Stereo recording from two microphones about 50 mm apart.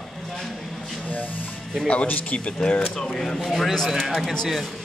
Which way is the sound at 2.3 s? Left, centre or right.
Left.